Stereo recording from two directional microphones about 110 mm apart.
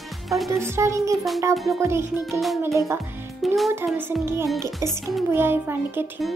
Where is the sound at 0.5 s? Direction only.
25° right (ahead or behind).